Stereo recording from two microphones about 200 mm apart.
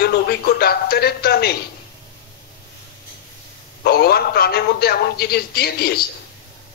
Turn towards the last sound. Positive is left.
turn(degrees=50)  # may be behind; listen again after turning